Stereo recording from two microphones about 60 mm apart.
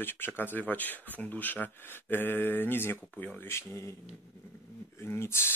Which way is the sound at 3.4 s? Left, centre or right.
Left.